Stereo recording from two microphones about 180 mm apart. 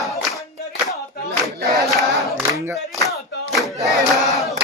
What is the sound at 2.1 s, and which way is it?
Battle cry, centre (ahead or behind).